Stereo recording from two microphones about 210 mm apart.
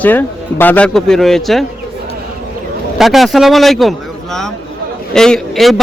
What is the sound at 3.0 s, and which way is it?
A man's voice, centre (ahead or behind).